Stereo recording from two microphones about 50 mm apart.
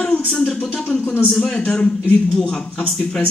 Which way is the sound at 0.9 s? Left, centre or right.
Left.